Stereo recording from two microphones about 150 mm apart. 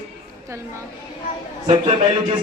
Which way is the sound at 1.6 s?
35° right (ahead or behind).